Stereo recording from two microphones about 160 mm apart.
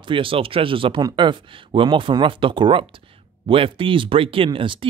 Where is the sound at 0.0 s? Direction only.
35° right (ahead or behind).